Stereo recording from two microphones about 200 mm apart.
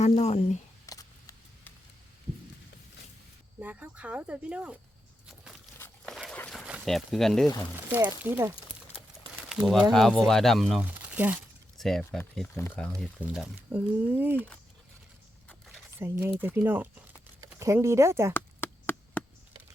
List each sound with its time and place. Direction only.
0.0 s speech: 35° left (ahead or behind)
0.9 s a sound: 15° left (ahead or behind)
3.6 s speech: 10° right (ahead or behind)
6.1 s a sound: centre (ahead or behind)
7.9 s speech: 10° right (ahead or behind); by 12.9 s 10° left (ahead or behind)
13.0 s speech: 5° right (ahead or behind)
14.3 s speech: 10° left (ahead or behind)
15.4 s a sound: centre (ahead or behind)
16.0 s speech: 10° right (ahead or behind)
18.3 s chop: 10° left (ahead or behind)